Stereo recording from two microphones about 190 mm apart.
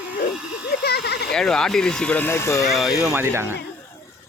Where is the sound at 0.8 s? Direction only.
55° left (ahead or behind).